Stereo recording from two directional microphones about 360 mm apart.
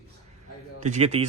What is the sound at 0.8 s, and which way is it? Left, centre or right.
Speech, centre.